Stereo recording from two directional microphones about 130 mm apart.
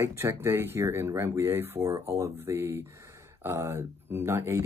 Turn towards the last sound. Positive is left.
turn(degrees=-20)  # may be behind; listen again after turning